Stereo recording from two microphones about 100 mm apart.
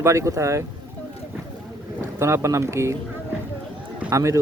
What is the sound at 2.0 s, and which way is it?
Speech, 25° right (ahead or behind).